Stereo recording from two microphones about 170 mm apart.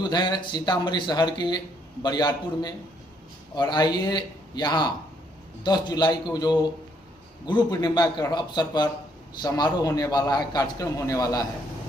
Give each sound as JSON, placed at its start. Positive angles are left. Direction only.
{"t": 0.0, "sound": "speech", "side_deg": 25}